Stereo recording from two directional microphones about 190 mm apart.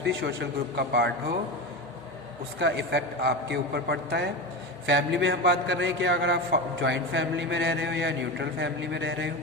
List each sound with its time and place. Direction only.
0.0 s a man's voice: 65° right (ahead or behind)
2.6 s a man's voice: 65° right (ahead or behind)